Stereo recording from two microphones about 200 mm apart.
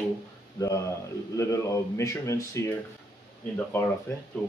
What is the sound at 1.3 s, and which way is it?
Speech, 15° left (ahead or behind).